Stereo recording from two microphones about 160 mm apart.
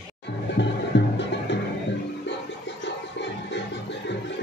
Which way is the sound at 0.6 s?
90° left.